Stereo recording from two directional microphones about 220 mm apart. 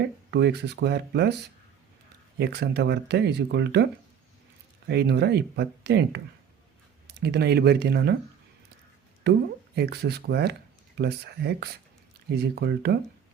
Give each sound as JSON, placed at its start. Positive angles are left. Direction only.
{"t": 0.3, "sound": "speech", "side_deg": -50}
{"t": 2.4, "sound": "speech", "side_deg": -50}
{"t": 4.9, "sound": "speech", "side_deg": -50}
{"t": 9.7, "sound": "speech", "side_deg": -45}